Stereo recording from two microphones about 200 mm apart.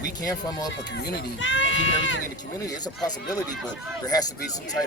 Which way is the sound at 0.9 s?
55° left (ahead or behind).